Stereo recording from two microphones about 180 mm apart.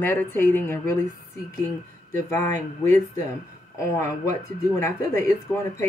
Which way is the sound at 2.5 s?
15° left (ahead or behind).